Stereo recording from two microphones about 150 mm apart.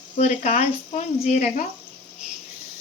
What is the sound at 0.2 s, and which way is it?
Speech, 50° left (ahead or behind).